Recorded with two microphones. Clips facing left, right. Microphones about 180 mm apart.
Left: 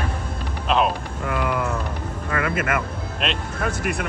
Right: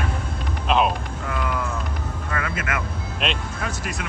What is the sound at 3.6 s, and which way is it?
Music, 55° left (ahead or behind).